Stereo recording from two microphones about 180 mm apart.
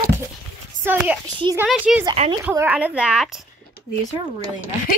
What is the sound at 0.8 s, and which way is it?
A woman's voice, 5° right (ahead or behind).